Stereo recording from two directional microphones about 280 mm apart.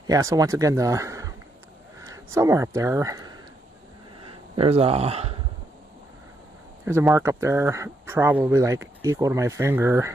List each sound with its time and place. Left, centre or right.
0.1 s speech: centre
6.8 s speech: centre